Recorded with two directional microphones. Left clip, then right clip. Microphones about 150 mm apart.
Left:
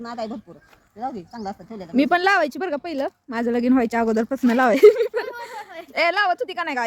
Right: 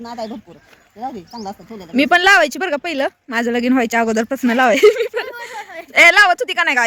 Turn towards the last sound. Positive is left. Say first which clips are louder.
# right 9 dB
turn(degrees=-5)  # may be behind; listen again after turning